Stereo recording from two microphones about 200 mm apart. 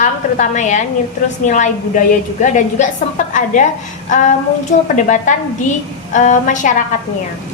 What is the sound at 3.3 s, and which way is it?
A woman's voice, 40° left (ahead or behind).